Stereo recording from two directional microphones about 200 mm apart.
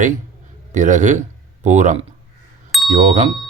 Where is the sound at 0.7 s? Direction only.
40° right (ahead or behind).